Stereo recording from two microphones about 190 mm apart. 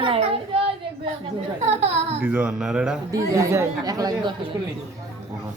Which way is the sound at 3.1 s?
15° right (ahead or behind).